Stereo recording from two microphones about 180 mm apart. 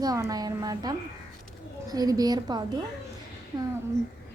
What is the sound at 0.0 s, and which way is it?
Speech, 20° right (ahead or behind).